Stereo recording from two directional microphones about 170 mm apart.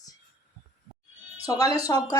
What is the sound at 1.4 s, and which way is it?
Speech, 20° left (ahead or behind).